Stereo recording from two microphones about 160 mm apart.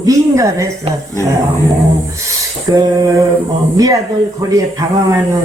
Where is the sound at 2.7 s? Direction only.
25° right (ahead or behind).